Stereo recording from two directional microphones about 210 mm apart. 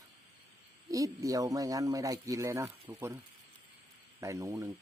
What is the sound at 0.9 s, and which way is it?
Speech, 15° right (ahead or behind).